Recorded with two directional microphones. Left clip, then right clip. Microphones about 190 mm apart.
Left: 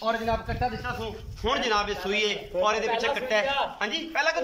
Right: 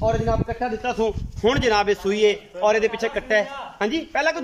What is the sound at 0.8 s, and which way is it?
A man's voice, 50° right (ahead or behind).